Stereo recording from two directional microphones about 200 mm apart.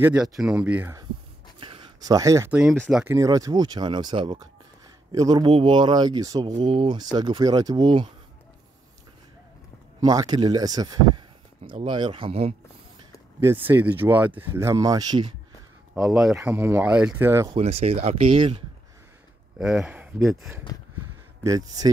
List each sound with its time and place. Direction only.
0.0 s speech: 5° right (ahead or behind)
1.6 s a sound: 25° right (ahead or behind)
2.6 s speech: centre (ahead or behind)
3.1 s speech: 15° right (ahead or behind)
9.9 s a man's voice: 20° right (ahead or behind)
13.4 s speech: 10° right (ahead or behind)
16.4 s speech: 10° right (ahead or behind)
17.6 s speech: 30° right (ahead or behind)
19.6 s speech: 5° right (ahead or behind)
21.5 s speech: 20° right (ahead or behind)